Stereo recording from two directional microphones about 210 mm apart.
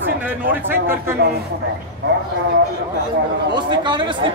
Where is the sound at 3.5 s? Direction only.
20° right (ahead or behind).